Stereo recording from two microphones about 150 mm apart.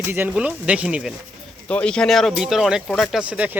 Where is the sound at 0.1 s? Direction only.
10° right (ahead or behind).